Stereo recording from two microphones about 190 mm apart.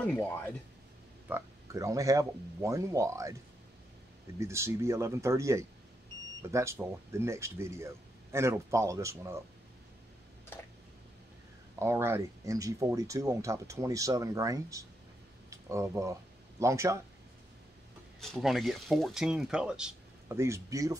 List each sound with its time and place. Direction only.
0.0 s speech: 10° left (ahead or behind)
1.3 s speech: 15° right (ahead or behind)
4.4 s speech: 15° right (ahead or behind)
11.8 s speech: 15° right (ahead or behind)
18.3 s speech: centre (ahead or behind); by 21.0 s 15° right (ahead or behind)